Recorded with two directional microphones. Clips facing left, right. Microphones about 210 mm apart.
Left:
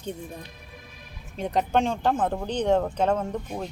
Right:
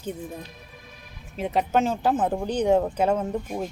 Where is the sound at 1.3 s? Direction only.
5° right (ahead or behind).